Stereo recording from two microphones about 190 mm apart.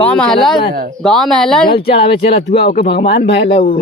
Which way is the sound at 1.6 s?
30° left (ahead or behind).